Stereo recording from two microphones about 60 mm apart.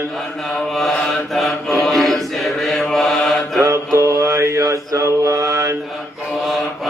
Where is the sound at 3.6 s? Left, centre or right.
Right.